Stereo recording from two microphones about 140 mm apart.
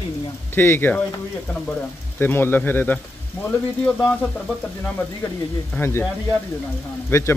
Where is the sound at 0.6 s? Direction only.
15° left (ahead or behind).